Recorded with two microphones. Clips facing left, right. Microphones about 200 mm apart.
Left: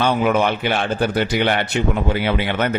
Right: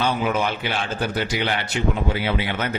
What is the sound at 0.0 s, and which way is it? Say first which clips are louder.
A man's voice: left 5 dB; 60° left (ahead or behind).